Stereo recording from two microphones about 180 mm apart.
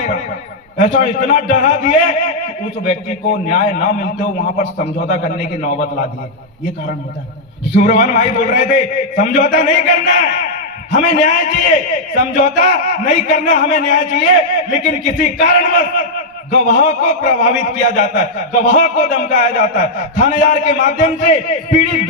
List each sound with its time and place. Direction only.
0.8 s a man's voice: 45° left (ahead or behind)
3.5 s a man's voice: 45° left (ahead or behind)
7.8 s a man's voice: 45° left (ahead or behind)